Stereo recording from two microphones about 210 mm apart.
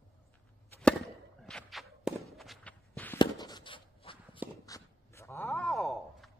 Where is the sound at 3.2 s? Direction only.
20° left (ahead or behind).